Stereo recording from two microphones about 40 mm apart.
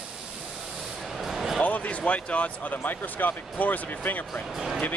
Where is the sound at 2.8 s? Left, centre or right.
Left.